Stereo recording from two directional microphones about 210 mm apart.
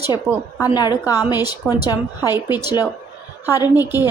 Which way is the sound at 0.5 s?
15° left (ahead or behind).